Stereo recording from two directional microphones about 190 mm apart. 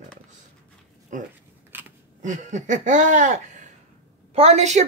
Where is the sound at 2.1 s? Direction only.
40° right (ahead or behind).